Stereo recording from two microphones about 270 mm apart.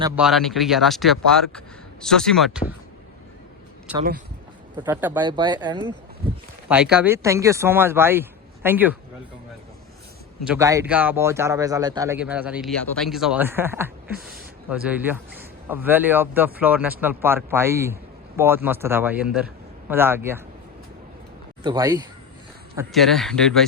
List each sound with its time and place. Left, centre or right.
0.2 s speech: centre
3.9 s speech: centre
6.7 s speech: centre
10.4 s speech: centre
21.6 s speech: centre
22.9 s speech: centre